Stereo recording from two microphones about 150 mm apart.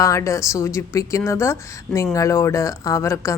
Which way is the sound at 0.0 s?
20° left (ahead or behind).